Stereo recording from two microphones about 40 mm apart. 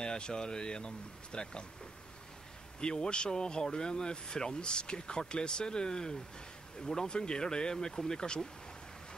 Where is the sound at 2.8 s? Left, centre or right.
Left.